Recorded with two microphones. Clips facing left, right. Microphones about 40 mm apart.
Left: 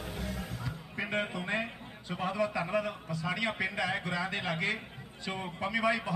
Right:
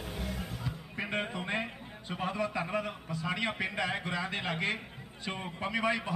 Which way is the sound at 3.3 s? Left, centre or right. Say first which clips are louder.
Left 1 dB; centre.